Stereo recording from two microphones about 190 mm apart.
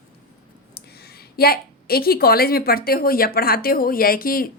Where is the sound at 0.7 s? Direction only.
55° left (ahead or behind).